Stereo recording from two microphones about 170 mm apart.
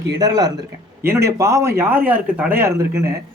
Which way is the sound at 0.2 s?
20° right (ahead or behind).